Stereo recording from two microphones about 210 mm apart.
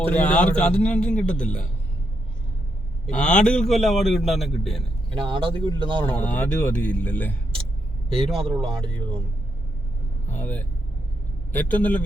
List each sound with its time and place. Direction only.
0.0 s a man's voice: 5° left (ahead or behind)
3.1 s a man's voice: 5° left (ahead or behind)
5.1 s speech: 25° right (ahead or behind)
6.1 s speech: 10° left (ahead or behind)
8.1 s speech: 25° right (ahead or behind)
8.4 s a man's voice: 5° left (ahead or behind)
10.2 s speech: 10° left (ahead or behind)